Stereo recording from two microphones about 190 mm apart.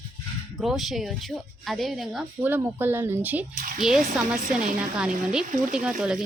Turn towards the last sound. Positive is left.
turn(degrees=-5)  # may be behind; listen again after turning